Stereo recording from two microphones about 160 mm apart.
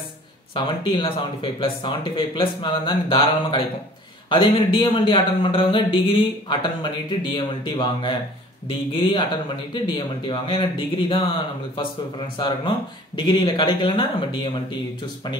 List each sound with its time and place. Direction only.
0.6 s speech: 30° left (ahead or behind)
12.4 s speech: 30° left (ahead or behind)